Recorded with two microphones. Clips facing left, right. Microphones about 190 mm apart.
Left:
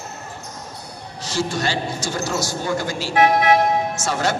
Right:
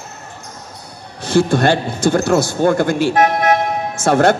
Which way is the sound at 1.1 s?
55° right (ahead or behind).